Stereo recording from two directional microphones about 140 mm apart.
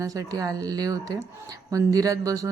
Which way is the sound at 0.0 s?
25° right (ahead or behind).